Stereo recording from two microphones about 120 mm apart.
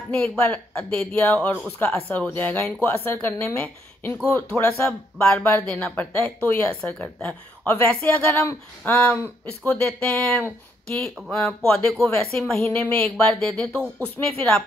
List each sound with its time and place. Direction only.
0.1 s speech: 15° left (ahead or behind)
12.6 s speech: 15° left (ahead or behind)